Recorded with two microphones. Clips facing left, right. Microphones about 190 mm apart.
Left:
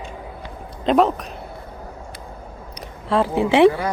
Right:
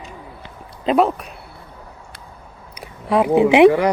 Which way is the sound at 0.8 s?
5° right (ahead or behind).